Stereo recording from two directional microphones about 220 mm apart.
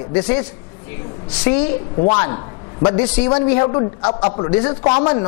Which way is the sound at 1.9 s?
25° left (ahead or behind).